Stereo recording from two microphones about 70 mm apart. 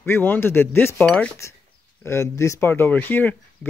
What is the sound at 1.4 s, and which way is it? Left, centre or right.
Speech, left.